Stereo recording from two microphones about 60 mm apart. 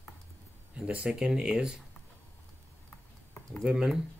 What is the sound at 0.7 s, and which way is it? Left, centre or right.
Speech, centre.